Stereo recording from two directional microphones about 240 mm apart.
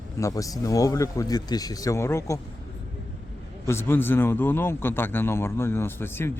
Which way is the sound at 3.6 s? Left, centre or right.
Centre.